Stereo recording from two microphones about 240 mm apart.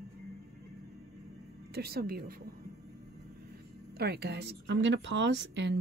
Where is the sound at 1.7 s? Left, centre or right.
Right.